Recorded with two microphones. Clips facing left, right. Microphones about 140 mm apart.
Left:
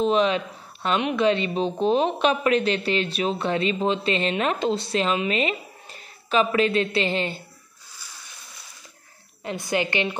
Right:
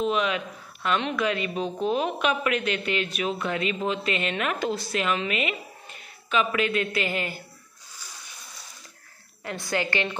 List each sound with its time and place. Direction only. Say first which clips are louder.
0.0 s a woman's voice: left 5 dB; 30° left (ahead or behind)
9.4 s a woman's voice: left 3 dB; 20° left (ahead or behind)